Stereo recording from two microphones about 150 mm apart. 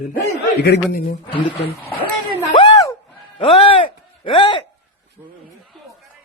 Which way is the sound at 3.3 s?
40° left (ahead or behind).